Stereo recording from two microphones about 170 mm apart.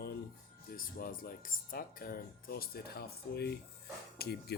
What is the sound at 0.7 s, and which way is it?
Speech, 55° left (ahead or behind).